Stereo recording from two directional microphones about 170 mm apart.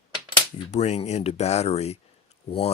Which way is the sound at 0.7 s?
40° left (ahead or behind).